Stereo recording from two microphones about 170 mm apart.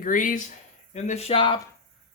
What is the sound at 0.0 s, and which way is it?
Speech, 50° left (ahead or behind).